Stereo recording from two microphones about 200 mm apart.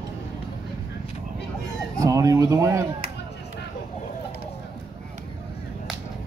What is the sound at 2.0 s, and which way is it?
Speech, 15° right (ahead or behind).